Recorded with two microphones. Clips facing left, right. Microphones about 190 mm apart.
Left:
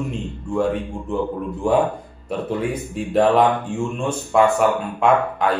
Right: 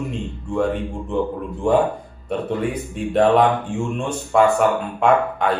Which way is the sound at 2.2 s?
Centre (ahead or behind).